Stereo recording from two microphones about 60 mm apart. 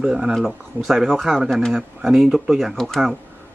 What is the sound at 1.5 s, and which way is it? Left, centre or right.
Speech, centre.